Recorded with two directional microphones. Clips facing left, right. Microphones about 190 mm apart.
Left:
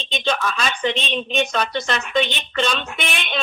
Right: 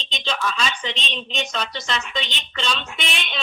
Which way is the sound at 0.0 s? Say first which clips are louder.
Left 4 dB; 55° left (ahead or behind).